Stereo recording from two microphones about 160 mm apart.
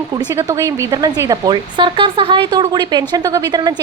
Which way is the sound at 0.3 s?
20° right (ahead or behind).